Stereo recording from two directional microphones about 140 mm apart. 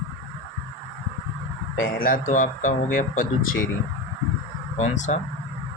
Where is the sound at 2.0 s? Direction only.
70° left (ahead or behind).